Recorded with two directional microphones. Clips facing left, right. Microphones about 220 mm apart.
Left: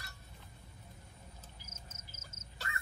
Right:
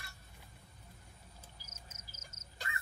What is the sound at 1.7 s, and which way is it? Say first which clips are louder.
Cricket: left 2 dB; 25° left (ahead or behind).